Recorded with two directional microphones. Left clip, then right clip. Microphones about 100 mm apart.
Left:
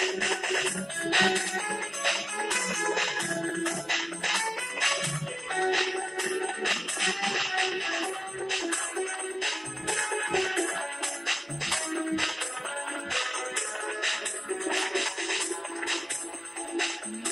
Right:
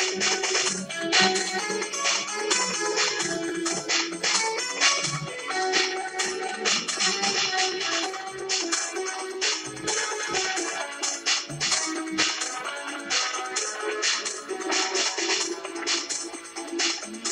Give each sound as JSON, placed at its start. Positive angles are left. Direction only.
{"t": 0.0, "sound": "music", "side_deg": -30}